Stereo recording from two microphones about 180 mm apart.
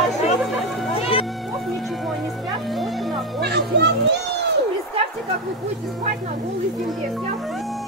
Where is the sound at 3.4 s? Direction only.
70° right (ahead or behind).